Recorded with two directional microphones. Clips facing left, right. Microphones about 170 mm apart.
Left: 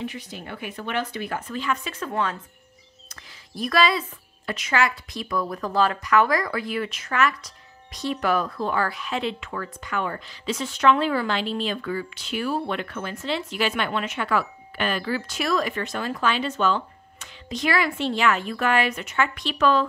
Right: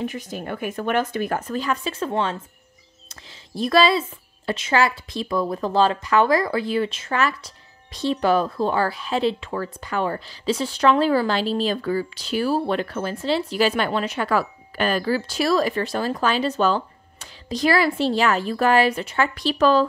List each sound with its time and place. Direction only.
0.0 s speech: 45° right (ahead or behind)